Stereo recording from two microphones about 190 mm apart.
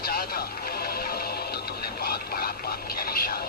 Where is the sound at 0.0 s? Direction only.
55° left (ahead or behind).